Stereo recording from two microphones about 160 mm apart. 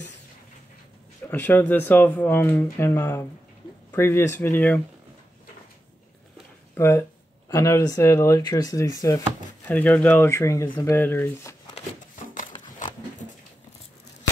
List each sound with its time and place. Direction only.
1.3 s speech: 10° left (ahead or behind)
6.8 s speech: 15° left (ahead or behind)
9.7 s speech: 10° left (ahead or behind)